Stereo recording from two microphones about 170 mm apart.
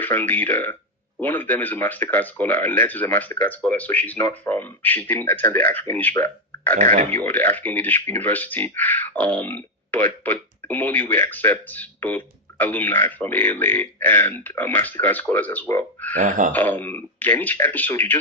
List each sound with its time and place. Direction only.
0.0 s speech: 10° left (ahead or behind)
6.7 s speech: 45° right (ahead or behind)
7.1 s speech: 10° left (ahead or behind)
16.1 s speech: 50° right (ahead or behind)
16.5 s speech: 10° left (ahead or behind)